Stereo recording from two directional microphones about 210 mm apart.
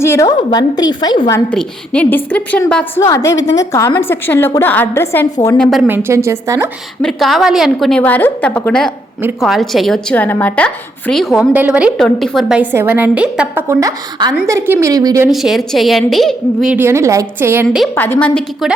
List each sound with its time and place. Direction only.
0.0 s a woman's voice: 15° left (ahead or behind)
1.5 s a woman's voice: 5° left (ahead or behind)
5.9 s a woman's voice: 10° right (ahead or behind)
7.0 s a woman's voice: centre (ahead or behind); by 15.3 s 15° right (ahead or behind)
15.3 s a woman's voice: centre (ahead or behind)
17.9 s a woman's voice: 10° left (ahead or behind)